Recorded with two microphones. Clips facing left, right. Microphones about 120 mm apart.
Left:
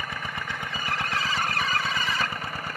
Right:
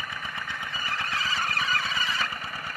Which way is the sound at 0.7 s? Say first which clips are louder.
Left 3 dB; 70° left (ahead or behind).